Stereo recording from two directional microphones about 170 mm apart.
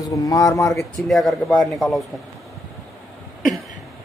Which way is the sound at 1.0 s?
Centre (ahead or behind).